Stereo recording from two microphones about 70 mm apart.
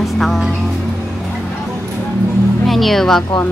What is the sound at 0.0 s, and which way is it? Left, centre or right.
Music, centre.